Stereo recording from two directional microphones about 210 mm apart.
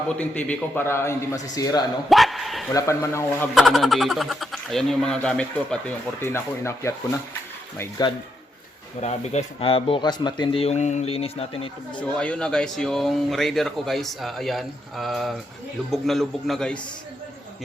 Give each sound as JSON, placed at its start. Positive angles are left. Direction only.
{"t": 0.2, "sound": "a man's voice", "side_deg": 5}
{"t": 2.0, "sound": "speech", "side_deg": 0}
{"t": 2.7, "sound": "a man's voice", "side_deg": 15}
{"t": 3.5, "sound": "speech", "side_deg": 0}
{"t": 9.0, "sound": "speech", "side_deg": 30}
{"t": 11.9, "sound": "speech", "side_deg": 5}